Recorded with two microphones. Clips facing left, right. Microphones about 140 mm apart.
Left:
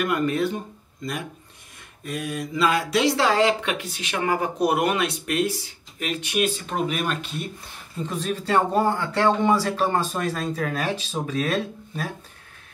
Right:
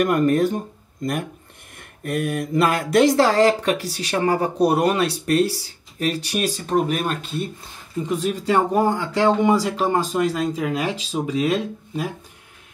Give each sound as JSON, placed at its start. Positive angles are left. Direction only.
{"t": 0.0, "sound": "speech", "side_deg": -45}
{"t": 8.1, "sound": "speech", "side_deg": -15}